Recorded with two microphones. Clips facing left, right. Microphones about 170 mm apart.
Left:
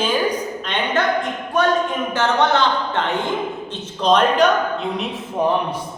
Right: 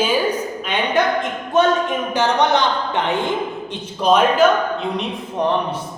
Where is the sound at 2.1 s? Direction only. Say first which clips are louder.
Right 1 dB; 15° right (ahead or behind); by 5.8 s 5° left (ahead or behind).